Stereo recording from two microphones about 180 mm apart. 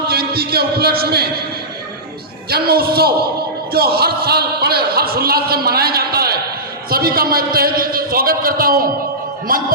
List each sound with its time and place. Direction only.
0.1 s a man's voice: 60° right (ahead or behind)
2.5 s a man's voice: 60° right (ahead or behind)